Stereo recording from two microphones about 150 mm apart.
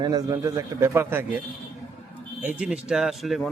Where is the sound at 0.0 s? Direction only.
25° right (ahead or behind).